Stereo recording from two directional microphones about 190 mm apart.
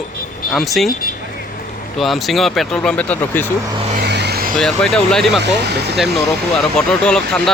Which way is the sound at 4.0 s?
60° right (ahead or behind).